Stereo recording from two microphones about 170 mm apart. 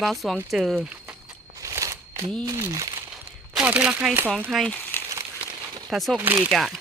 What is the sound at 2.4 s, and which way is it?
Speech, 20° right (ahead or behind).